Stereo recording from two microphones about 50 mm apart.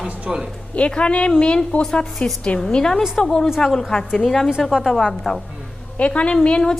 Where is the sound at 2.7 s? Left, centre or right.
Centre.